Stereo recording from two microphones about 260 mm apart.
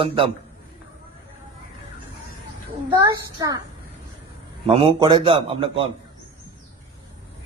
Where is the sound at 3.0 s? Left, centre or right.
Centre.